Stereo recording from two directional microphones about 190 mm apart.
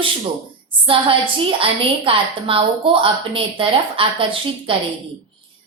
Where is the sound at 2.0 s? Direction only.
30° right (ahead or behind).